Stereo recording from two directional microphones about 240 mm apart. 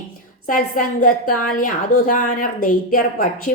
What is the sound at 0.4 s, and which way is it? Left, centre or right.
A woman's voice, left.